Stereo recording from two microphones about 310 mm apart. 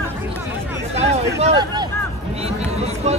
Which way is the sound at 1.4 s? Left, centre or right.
Centre.